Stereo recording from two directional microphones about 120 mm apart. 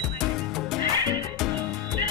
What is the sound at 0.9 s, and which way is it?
Music, 35° right (ahead or behind).